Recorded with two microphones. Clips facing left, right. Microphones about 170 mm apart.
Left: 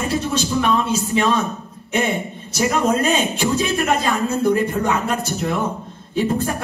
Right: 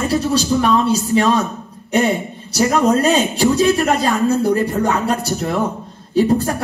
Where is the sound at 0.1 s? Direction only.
35° right (ahead or behind).